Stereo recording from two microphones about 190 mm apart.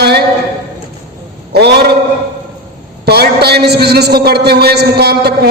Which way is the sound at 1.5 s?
60° right (ahead or behind).